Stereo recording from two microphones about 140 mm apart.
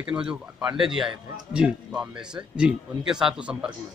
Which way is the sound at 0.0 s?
5° right (ahead or behind).